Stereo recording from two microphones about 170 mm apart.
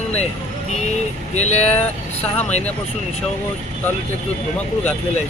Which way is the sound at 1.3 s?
40° left (ahead or behind).